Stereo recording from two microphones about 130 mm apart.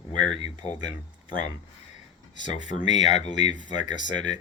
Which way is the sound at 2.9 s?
60° left (ahead or behind).